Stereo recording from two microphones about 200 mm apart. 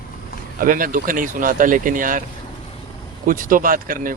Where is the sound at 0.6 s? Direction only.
45° right (ahead or behind).